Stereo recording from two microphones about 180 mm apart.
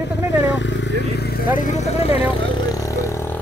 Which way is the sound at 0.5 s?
90° left.